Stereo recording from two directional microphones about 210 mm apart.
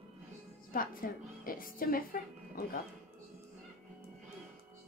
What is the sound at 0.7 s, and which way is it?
A woman's voice, 40° left (ahead or behind).